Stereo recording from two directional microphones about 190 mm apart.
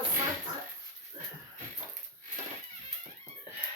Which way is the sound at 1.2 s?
30° right (ahead or behind).